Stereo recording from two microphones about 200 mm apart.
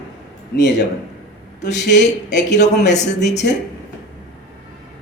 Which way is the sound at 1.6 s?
60° left (ahead or behind).